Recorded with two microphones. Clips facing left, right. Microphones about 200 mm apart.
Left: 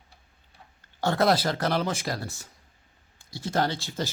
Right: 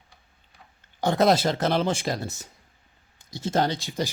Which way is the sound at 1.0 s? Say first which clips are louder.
Right 3 dB; 20° right (ahead or behind).